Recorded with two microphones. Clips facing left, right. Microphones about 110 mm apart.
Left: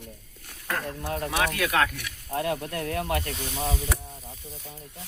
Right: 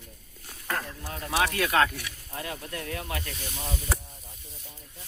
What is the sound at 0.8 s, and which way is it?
Speech, 55° left (ahead or behind).